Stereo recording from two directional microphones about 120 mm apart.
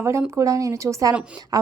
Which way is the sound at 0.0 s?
25° right (ahead or behind).